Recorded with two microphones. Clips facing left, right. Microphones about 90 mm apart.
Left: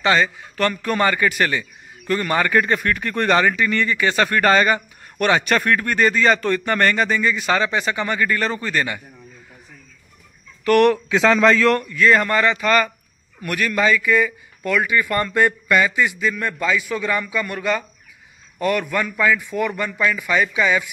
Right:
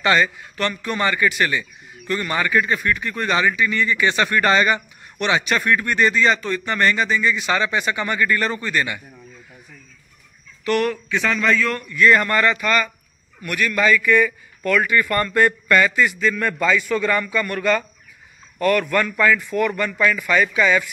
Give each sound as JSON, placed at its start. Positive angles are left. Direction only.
{"t": 0.0, "sound": "a man's voice", "side_deg": 25}
{"t": 0.6, "sound": "speech", "side_deg": 40}
{"t": 4.2, "sound": "speech", "side_deg": 40}
{"t": 10.8, "sound": "a man's voice", "side_deg": 85}
{"t": 11.8, "sound": "speech", "side_deg": 30}
{"t": 13.4, "sound": "speech", "side_deg": 35}